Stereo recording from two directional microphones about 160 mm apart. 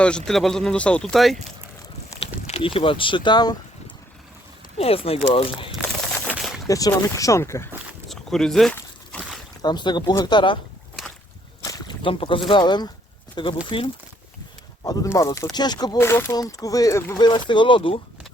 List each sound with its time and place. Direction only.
0.0 s speech: 5° left (ahead or behind)
2.2 s speech: 35° left (ahead or behind)
4.8 s speech: 40° left (ahead or behind)
6.7 s speech: 20° left (ahead or behind)
8.1 s speech: centre (ahead or behind)
9.6 s speech: 25° left (ahead or behind)
11.6 s a sound: 20° left (ahead or behind)
12.0 s speech: 35° left (ahead or behind)
14.8 s speech: 20° left (ahead or behind)
16.0 s speech: 15° left (ahead or behind); by 18.0 s 35° left (ahead or behind)